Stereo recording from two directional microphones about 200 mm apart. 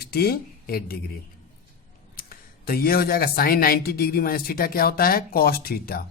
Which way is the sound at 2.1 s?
45° left (ahead or behind).